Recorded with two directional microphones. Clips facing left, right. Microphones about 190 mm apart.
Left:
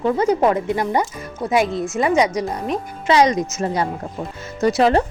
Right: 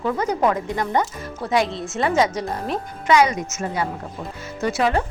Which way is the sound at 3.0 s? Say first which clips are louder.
Left 2 dB; 35° left (ahead or behind).